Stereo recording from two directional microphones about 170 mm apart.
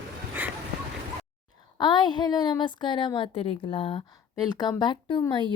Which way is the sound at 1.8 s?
25° left (ahead or behind).